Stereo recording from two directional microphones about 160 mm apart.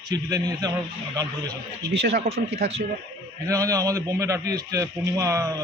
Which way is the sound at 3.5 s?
20° right (ahead or behind).